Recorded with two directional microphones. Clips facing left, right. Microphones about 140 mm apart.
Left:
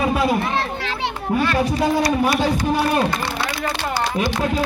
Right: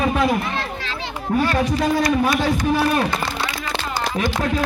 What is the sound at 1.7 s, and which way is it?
A man's voice, 15° left (ahead or behind).